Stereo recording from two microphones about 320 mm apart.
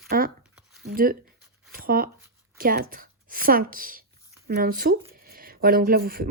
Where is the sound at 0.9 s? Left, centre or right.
Right.